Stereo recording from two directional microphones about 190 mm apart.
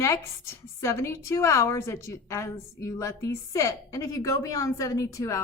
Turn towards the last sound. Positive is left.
turn(degrees=15)  # may be behind; listen again after turning